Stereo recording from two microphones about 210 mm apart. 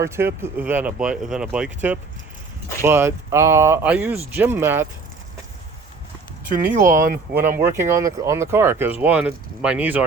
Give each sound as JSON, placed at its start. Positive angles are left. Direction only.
{"t": 0.0, "sound": "speech", "side_deg": -10}
{"t": 6.5, "sound": "speech", "side_deg": -40}
{"t": 7.8, "sound": "speech", "side_deg": -15}